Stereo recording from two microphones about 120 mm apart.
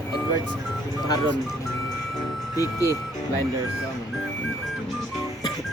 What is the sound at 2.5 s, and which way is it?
Speech, 30° left (ahead or behind).